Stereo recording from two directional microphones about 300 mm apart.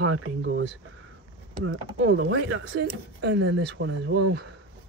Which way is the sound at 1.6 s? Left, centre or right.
Right.